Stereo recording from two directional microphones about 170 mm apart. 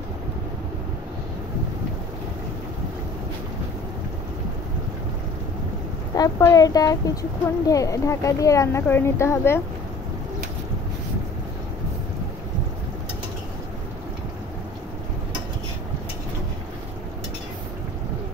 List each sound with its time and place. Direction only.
6.1 s speech: 20° left (ahead or behind)